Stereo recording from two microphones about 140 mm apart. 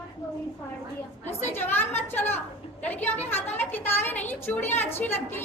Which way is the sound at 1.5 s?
15° left (ahead or behind).